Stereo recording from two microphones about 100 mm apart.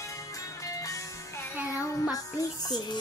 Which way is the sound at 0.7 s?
35° left (ahead or behind).